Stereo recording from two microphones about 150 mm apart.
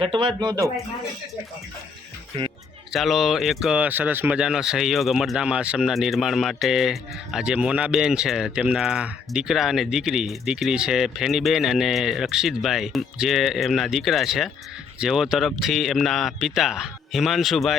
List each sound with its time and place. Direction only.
0.0 s speech: 35° right (ahead or behind)
2.9 s speech: centre (ahead or behind)